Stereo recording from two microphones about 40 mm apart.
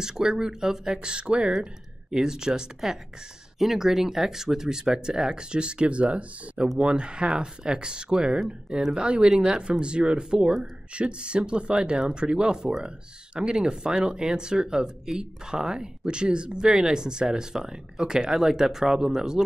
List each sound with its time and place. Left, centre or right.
0.0 s speech: centre